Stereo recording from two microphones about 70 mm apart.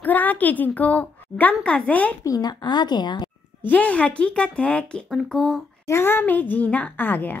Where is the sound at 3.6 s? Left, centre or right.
Left.